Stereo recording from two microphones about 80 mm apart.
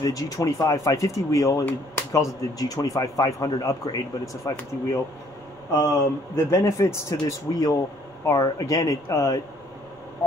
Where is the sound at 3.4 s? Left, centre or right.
Left.